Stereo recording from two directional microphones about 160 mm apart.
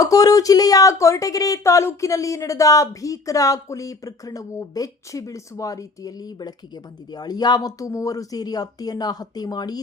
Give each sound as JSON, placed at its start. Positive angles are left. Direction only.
{"t": 0.0, "sound": "speech", "side_deg": 20}